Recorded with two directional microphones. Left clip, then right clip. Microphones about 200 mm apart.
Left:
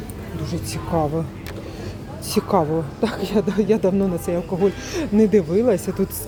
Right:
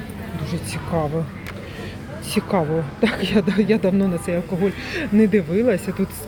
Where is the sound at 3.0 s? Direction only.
Centre (ahead or behind).